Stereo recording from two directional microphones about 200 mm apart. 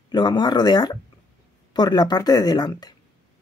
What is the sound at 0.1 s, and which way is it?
Speech, 20° left (ahead or behind).